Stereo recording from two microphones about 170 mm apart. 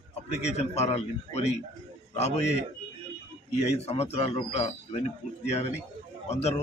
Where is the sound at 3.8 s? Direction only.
35° left (ahead or behind).